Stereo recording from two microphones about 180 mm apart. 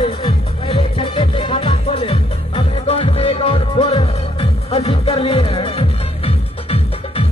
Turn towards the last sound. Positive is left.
turn(degrees=35)  # may be behind; listen again after turning